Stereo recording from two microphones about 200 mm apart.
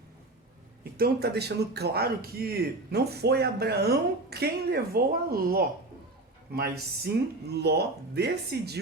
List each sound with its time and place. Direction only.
0.9 s speech: 50° right (ahead or behind)